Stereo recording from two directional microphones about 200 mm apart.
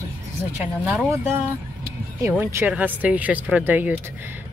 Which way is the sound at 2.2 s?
15° right (ahead or behind).